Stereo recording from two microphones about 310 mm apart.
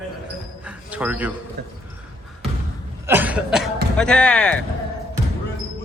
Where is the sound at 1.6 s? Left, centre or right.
Right.